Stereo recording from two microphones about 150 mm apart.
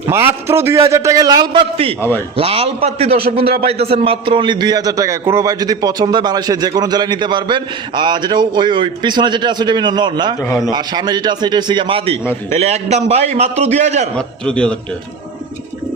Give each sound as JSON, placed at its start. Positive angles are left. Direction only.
{"t": 0.1, "sound": "a man's voice", "side_deg": -15}
{"t": 2.0, "sound": "a man's voice", "side_deg": 15}
{"t": 2.3, "sound": "a man's voice", "side_deg": -40}
{"t": 14.2, "sound": "a man's voice", "side_deg": 5}